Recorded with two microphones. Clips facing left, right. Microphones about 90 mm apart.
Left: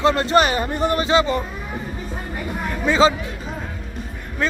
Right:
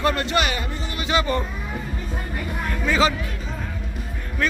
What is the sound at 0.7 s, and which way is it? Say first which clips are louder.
Speech: left 12 dB; 60° left (ahead or behind).